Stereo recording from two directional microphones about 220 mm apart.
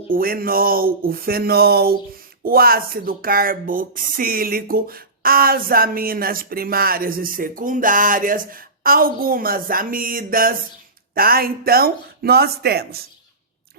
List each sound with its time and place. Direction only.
0.1 s speech: 40° right (ahead or behind)